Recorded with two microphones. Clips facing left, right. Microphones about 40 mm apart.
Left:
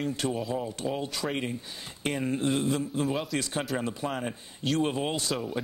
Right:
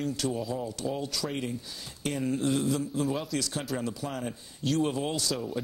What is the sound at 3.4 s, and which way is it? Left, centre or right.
Speech, left.